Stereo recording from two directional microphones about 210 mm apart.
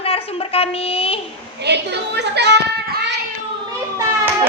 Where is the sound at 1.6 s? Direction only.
55° right (ahead or behind).